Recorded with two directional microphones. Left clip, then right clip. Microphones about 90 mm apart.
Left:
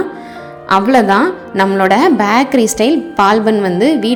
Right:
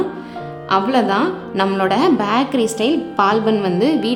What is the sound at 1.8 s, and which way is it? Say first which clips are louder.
A woman's voice: left 6 dB; 40° left (ahead or behind).